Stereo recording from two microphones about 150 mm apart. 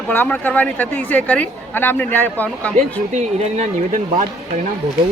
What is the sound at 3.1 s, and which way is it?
Speech, 50° right (ahead or behind).